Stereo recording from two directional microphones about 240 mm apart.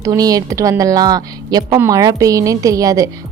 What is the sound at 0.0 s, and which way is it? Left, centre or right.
Speech, centre.